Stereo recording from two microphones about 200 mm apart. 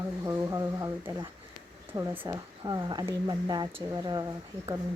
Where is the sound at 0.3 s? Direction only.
15° right (ahead or behind).